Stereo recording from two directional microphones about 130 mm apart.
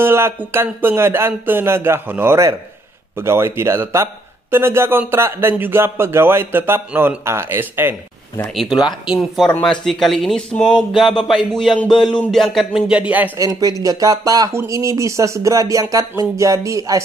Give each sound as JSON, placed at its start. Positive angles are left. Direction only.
{"t": 0.0, "sound": "a man's voice", "side_deg": -20}
{"t": 8.5, "sound": "a sound", "side_deg": -5}
{"t": 13.4, "sound": "a man's voice", "side_deg": -25}